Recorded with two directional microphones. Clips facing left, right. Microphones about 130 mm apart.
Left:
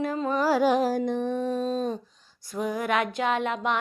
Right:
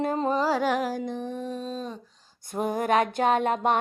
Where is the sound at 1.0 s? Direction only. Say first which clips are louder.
Left 5 dB; 60° left (ahead or behind).